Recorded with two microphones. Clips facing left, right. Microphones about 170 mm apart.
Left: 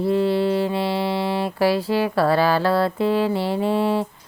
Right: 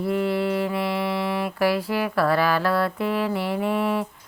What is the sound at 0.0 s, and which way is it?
Mantra, 30° left (ahead or behind).